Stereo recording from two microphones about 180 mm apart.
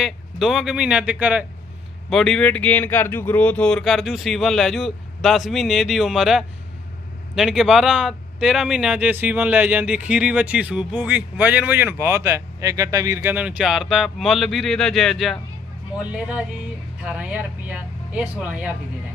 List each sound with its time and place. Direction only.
0.0 s speech: centre (ahead or behind)